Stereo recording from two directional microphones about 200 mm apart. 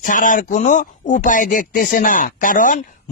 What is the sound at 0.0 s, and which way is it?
Speech, 40° left (ahead or behind).